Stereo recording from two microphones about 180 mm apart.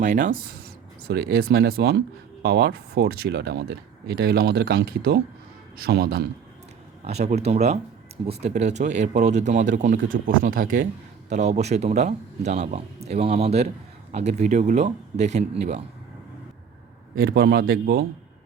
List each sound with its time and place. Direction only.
0.0 s speech: 45° right (ahead or behind)
1.0 s speech: 60° right (ahead or behind)
7.0 s a man's voice: 35° right (ahead or behind)
17.2 s speech: 60° right (ahead or behind)